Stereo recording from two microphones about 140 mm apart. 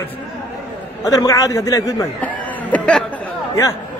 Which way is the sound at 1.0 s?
25° left (ahead or behind).